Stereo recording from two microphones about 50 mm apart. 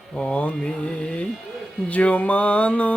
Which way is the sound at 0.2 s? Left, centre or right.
Left.